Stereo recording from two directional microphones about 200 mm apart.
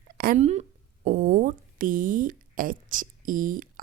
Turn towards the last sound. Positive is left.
turn(degrees=-45)  # may be behind; listen again after turning